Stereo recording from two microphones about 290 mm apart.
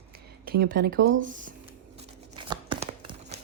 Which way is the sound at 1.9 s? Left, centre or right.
Centre.